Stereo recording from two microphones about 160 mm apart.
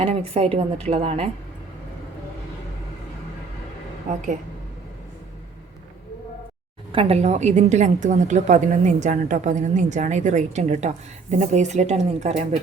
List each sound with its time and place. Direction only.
0.0 s a woman's voice: 40° right (ahead or behind)
4.1 s a woman's voice: 50° right (ahead or behind)
6.9 s a woman's voice: 40° right (ahead or behind)